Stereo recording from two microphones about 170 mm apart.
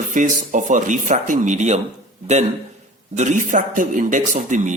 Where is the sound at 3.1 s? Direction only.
45° right (ahead or behind).